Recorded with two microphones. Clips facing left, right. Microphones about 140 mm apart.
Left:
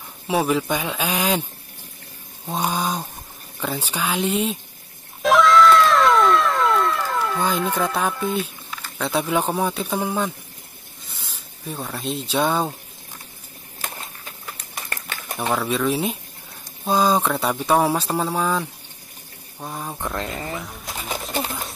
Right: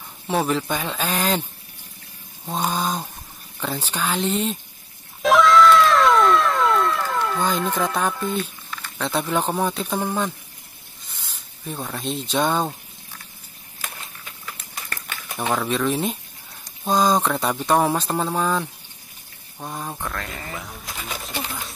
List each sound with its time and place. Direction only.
0.3 s speech: 5° left (ahead or behind)
2.4 s speech: 10° left (ahead or behind)
5.2 s cat: centre (ahead or behind)
11.1 s speech: centre (ahead or behind)
15.3 s speech: centre (ahead or behind)
20.0 s speech: 20° left (ahead or behind)
20.5 s speech: centre (ahead or behind)